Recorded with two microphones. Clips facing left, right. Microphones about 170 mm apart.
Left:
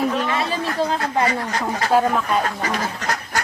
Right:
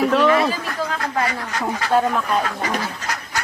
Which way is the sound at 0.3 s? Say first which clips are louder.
Right 4 dB; 25° left (ahead or behind).